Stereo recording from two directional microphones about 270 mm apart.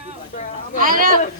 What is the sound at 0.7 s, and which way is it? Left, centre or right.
Speech, right.